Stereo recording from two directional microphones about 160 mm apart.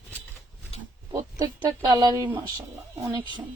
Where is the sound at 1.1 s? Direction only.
20° right (ahead or behind).